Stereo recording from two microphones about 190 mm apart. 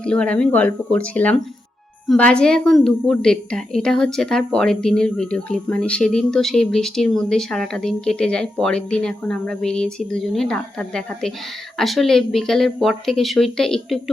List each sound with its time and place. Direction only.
0.0 s a woman's voice: 5° left (ahead or behind)